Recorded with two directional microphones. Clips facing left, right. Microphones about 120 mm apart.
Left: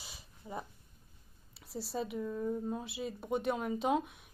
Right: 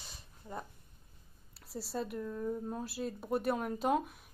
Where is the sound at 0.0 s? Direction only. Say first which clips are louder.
Left 2 dB; 5° left (ahead or behind).